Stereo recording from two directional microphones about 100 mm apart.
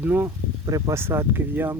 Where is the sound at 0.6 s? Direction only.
35° right (ahead or behind).